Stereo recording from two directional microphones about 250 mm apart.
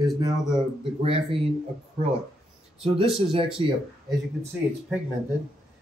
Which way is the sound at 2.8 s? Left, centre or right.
Right.